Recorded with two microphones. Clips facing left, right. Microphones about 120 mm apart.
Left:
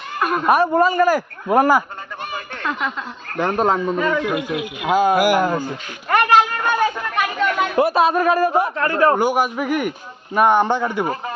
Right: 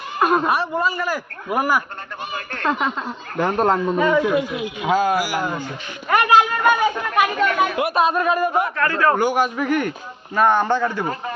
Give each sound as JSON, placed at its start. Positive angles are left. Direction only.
{"t": 0.2, "sound": "a sound", "side_deg": -25}
{"t": 0.4, "sound": "a man's voice", "side_deg": 50}
{"t": 3.2, "sound": "speech", "side_deg": 0}
{"t": 3.9, "sound": "speech", "side_deg": -15}
{"t": 4.8, "sound": "speech", "side_deg": 15}
{"t": 5.1, "sound": "speech", "side_deg": 55}
{"t": 6.1, "sound": "a sound", "side_deg": -5}
{"t": 7.8, "sound": "a man's voice", "side_deg": 30}
{"t": 9.1, "sound": "speech", "side_deg": 10}